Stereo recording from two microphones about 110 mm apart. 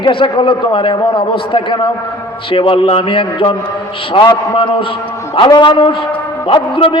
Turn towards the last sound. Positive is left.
turn(degrees=50)  # may be behind; listen again after turning